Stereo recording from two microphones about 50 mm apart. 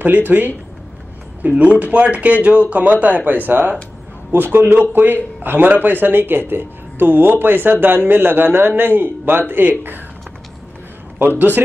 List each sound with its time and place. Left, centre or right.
0.0 s speech: right
1.6 s speech: right
11.1 s speech: right